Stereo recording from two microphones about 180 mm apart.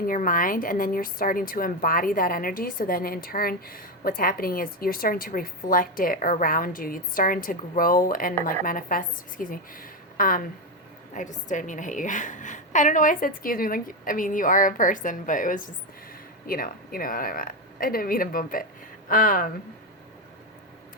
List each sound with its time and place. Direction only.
0.1 s a woman's voice: 50° left (ahead or behind)